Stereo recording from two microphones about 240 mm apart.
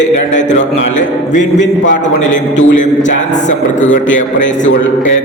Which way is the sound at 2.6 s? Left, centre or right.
Left.